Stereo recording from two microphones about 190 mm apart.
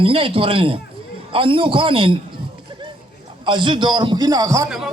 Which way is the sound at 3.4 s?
25° right (ahead or behind).